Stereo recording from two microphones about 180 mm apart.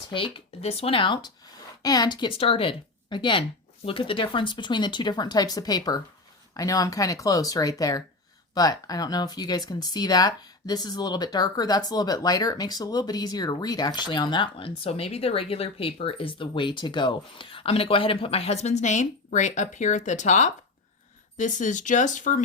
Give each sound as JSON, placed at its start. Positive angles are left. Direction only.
{"t": 0.1, "sound": "speech", "side_deg": 30}